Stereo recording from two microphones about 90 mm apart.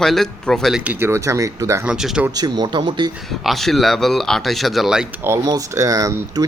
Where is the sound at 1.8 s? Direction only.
5° right (ahead or behind).